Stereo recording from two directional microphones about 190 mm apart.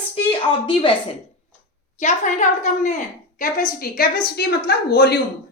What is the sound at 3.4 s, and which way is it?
A woman's voice, 50° left (ahead or behind).